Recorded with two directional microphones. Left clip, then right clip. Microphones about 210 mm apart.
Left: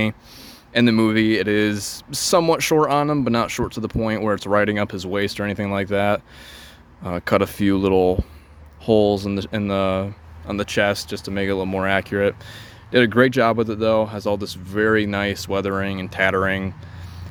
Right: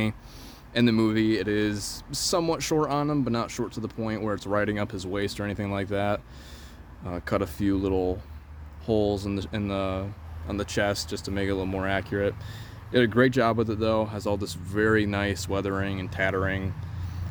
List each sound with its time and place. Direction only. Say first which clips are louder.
0.7 s speech: left 6 dB; 30° left (ahead or behind)